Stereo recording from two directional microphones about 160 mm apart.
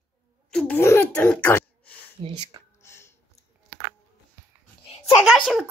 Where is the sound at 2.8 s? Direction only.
15° left (ahead or behind).